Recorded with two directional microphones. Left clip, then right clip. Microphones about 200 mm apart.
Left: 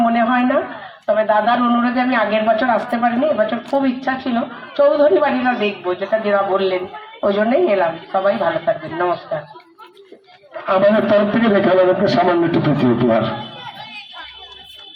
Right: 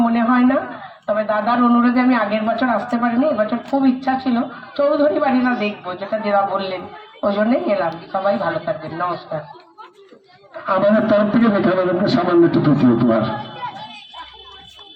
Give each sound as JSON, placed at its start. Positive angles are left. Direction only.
{"t": 0.0, "sound": "a sound", "side_deg": 45}
{"t": 1.0, "sound": "a woman's voice", "side_deg": 45}
{"t": 10.7, "sound": "a woman's voice", "side_deg": 45}